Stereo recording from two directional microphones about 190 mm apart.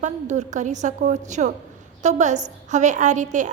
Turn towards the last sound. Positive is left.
turn(degrees=-40)  # may be behind; listen again after turning